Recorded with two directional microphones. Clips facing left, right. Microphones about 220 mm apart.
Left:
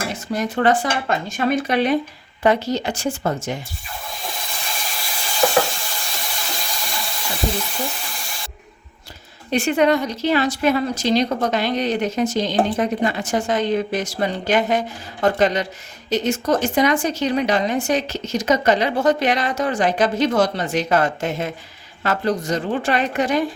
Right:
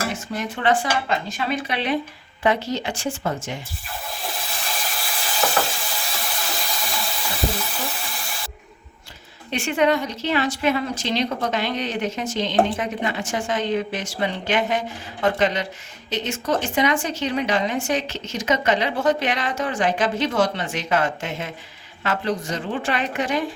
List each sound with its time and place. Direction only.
0.3 s speech: 40° left (ahead or behind)
4.1 s a sound: centre (ahead or behind)
9.5 s speech: 40° left (ahead or behind)